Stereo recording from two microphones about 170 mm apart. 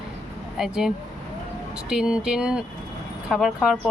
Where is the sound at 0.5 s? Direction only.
Centre (ahead or behind).